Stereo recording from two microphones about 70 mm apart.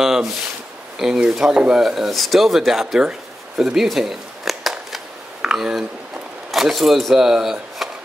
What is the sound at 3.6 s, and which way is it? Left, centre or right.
Shuffling cards, centre.